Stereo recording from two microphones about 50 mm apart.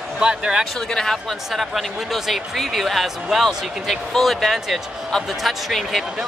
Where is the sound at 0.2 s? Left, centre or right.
Centre.